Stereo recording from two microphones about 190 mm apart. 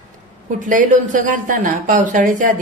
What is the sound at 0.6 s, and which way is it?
Speech, 45° right (ahead or behind).